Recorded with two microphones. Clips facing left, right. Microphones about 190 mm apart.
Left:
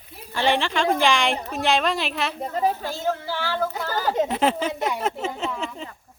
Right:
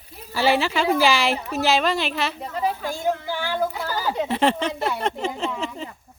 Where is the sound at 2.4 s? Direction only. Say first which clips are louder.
Left 6 dB; 40° left (ahead or behind).